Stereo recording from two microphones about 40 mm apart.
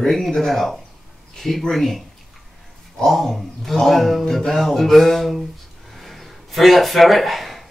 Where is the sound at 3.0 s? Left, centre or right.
Centre.